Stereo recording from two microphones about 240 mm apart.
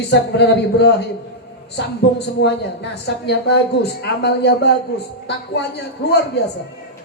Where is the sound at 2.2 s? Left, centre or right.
Left.